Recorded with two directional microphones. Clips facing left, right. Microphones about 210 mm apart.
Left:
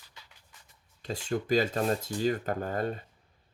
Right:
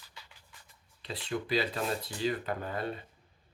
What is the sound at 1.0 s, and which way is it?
Speech, 45° left (ahead or behind).